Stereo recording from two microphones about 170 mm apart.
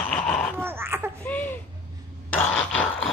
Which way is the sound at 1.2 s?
10° left (ahead or behind).